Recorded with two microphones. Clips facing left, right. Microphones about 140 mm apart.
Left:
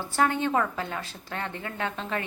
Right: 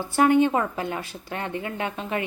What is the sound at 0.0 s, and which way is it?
Speech, 15° right (ahead or behind).